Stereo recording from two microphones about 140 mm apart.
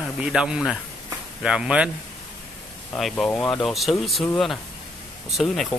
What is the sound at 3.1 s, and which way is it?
Speech, 5° left (ahead or behind).